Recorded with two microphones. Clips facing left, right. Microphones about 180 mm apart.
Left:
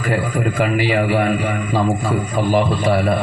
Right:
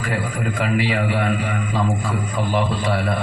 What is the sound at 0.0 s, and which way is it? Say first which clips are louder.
Speech: left 5 dB; 25° left (ahead or behind).